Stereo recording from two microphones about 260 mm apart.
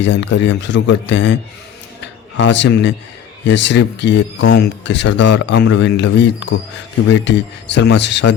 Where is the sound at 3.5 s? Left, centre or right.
Left.